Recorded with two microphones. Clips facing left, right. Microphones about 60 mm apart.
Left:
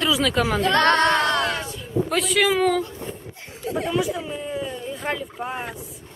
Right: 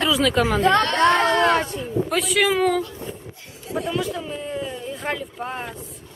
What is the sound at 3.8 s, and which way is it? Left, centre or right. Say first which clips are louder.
Speech: left 2 dB; centre.